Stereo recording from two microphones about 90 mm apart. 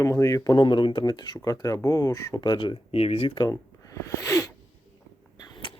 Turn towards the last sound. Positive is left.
turn(degrees=70)  # may be behind; listen again after turning